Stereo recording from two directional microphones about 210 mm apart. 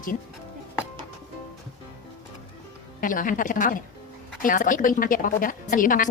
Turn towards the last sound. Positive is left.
turn(degrees=40)  # may be behind; listen again after turning